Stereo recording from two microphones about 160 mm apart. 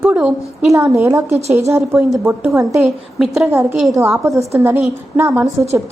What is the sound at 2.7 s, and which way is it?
Speech, centre (ahead or behind).